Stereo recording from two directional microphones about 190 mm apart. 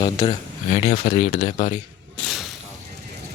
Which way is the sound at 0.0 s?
25° left (ahead or behind).